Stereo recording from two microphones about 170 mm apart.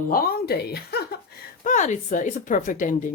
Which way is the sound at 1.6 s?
45° left (ahead or behind).